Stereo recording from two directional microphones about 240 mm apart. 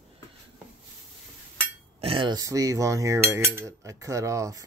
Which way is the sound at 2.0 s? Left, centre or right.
Right.